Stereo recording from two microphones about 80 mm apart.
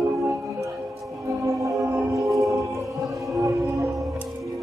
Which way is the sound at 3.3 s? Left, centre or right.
Right.